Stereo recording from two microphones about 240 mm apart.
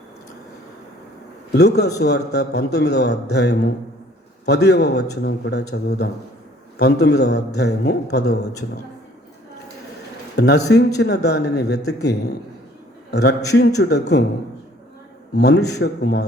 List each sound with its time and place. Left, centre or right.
1.5 s a man's voice: left
10.3 s a man's voice: left
13.1 s a man's voice: left
15.4 s a man's voice: left